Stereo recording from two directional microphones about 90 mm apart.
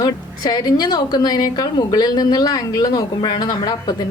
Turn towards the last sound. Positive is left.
turn(degrees=50)  # may be behind; listen again after turning